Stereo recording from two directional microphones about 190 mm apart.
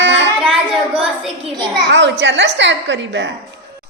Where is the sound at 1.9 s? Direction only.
70° right (ahead or behind).